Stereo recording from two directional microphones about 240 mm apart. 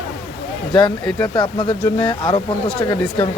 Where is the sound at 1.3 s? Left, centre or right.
Centre.